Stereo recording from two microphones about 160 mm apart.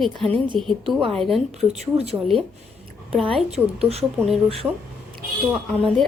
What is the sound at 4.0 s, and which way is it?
Speech, centre (ahead or behind).